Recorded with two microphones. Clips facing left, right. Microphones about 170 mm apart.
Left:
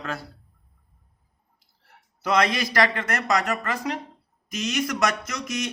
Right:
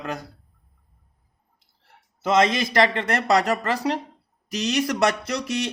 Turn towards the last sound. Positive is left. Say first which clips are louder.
# right 4 dB
turn(degrees=-30)  # may be behind; listen again after turning